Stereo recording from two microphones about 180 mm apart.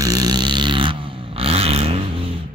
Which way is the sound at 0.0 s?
20° right (ahead or behind).